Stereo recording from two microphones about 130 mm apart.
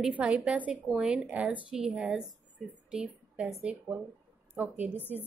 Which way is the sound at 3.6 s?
10° right (ahead or behind).